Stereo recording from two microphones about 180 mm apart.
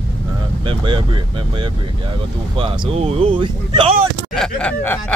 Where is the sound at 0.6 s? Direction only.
25° right (ahead or behind).